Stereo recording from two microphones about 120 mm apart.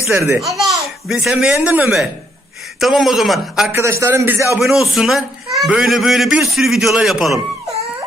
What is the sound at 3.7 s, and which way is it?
Speech, 20° right (ahead or behind).